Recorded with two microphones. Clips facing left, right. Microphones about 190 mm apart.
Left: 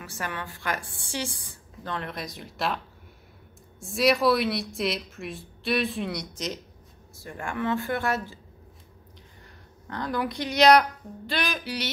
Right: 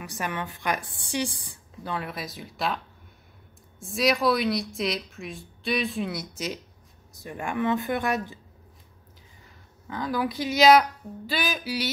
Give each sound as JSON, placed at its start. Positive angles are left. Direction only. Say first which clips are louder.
{"t": 0.0, "sound": "a woman's voice", "louder": "right 3 dB", "side_deg": -15}
{"t": 3.8, "sound": "a woman's voice", "louder": "left 1 dB", "side_deg": 0}
{"t": 9.4, "sound": "speech", "louder": "left 3 dB", "side_deg": 0}